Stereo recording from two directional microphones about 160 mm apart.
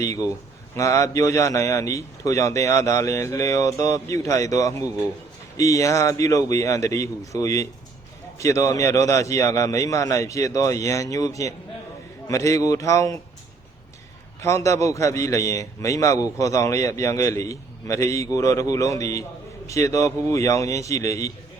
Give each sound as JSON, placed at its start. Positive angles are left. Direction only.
{"t": 0.0, "sound": "a man's voice", "side_deg": 20}
{"t": 14.4, "sound": "a man's voice", "side_deg": 20}